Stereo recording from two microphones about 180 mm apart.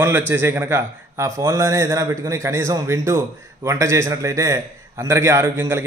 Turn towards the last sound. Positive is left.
turn(degrees=-15)  # may be behind; listen again after turning